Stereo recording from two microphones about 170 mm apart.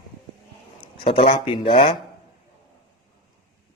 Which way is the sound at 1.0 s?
30° left (ahead or behind).